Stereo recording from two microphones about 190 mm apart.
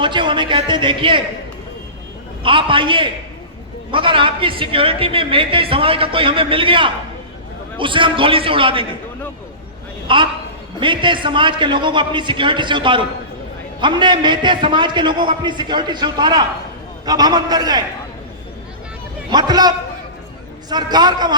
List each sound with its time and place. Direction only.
0.0 s a woman's voice: 25° right (ahead or behind)
2.4 s a woman's voice: 25° right (ahead or behind)
10.1 s a woman's voice: 25° right (ahead or behind)
19.3 s a woman's voice: 20° right (ahead or behind)